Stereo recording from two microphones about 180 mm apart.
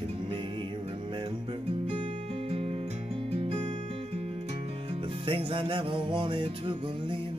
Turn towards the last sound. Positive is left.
turn(degrees=-25)  # may be behind; listen again after turning